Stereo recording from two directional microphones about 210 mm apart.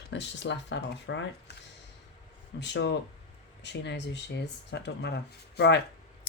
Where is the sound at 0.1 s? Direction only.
55° left (ahead or behind).